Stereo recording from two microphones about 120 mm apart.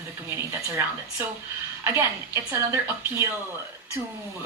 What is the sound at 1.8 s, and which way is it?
Speech, 20° right (ahead or behind).